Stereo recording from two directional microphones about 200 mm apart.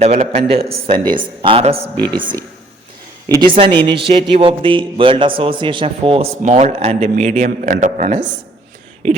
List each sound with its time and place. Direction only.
0.0 s a man's voice: 30° right (ahead or behind)
3.2 s a man's voice: 20° right (ahead or behind); by 8.1 s 40° right (ahead or behind)
8.1 s a man's voice: 25° right (ahead or behind)